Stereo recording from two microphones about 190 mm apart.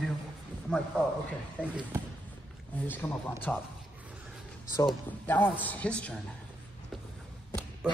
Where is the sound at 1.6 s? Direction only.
5° left (ahead or behind).